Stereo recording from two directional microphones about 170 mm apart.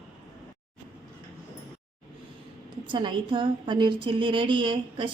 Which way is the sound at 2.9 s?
30° right (ahead or behind).